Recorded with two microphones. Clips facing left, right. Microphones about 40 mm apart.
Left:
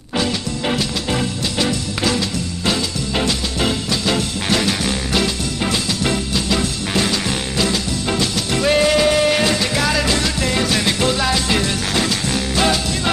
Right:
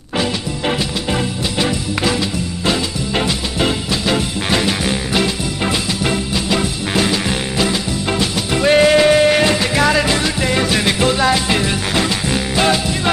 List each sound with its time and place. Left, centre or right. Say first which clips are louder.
0.2 s music: right 1 dB; centre